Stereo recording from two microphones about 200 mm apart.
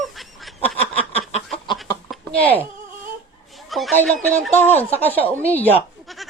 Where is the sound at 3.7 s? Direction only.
Centre (ahead or behind).